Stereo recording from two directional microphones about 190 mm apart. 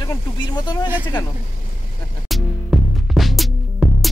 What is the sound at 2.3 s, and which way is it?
Music, centre (ahead or behind).